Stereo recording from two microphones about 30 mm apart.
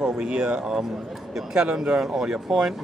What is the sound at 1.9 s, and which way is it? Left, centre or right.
Speech, centre.